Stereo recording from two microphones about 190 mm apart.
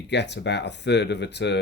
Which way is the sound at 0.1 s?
65° left (ahead or behind).